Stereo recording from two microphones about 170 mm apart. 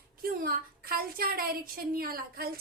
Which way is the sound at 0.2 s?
60° right (ahead or behind).